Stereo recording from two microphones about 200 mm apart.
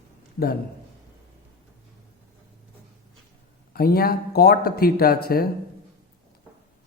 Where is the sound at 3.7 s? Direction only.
50° left (ahead or behind).